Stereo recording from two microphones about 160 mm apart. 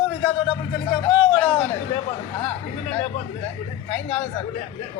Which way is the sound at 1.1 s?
30° left (ahead or behind).